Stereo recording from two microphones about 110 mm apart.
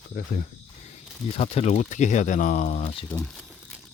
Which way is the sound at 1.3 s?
65° left (ahead or behind).